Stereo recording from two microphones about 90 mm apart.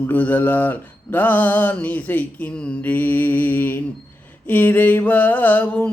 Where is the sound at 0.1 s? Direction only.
20° left (ahead or behind).